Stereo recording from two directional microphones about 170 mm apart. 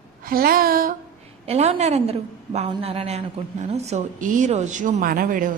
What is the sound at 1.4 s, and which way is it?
A woman's voice, 40° right (ahead or behind).